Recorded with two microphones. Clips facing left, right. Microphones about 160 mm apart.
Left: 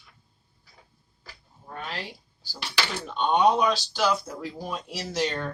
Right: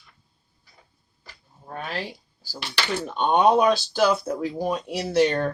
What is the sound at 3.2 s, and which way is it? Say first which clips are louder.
Speech: right 3 dB; 50° right (ahead or behind).